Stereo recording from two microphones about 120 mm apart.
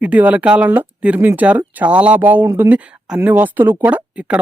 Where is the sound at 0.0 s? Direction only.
10° right (ahead or behind).